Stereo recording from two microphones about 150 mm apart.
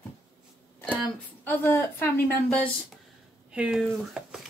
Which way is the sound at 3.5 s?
5° right (ahead or behind).